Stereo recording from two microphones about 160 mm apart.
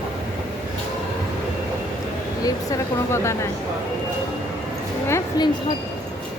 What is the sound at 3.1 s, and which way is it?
Speech, 15° left (ahead or behind).